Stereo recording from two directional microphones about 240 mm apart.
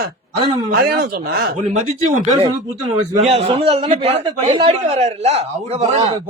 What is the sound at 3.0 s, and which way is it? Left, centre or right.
A man's voice, right.